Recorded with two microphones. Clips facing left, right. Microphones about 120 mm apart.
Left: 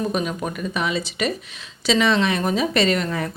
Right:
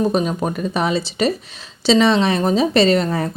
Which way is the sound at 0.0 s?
30° right (ahead or behind).